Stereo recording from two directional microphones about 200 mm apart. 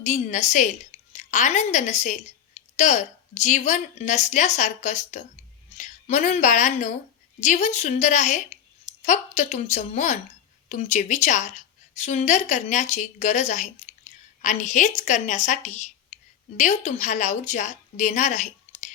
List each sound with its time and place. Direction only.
0.0 s a woman's voice: 35° left (ahead or behind)